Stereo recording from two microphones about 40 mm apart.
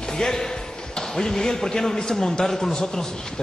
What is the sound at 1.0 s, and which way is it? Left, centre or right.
A man's voice, centre.